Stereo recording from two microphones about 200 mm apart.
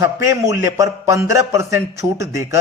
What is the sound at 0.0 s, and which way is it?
A man's voice, 15° right (ahead or behind).